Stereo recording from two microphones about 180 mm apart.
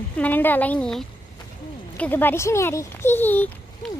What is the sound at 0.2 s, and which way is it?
Speech, 10° left (ahead or behind).